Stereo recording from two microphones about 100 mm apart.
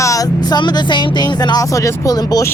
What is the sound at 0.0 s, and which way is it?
Speech, 35° left (ahead or behind).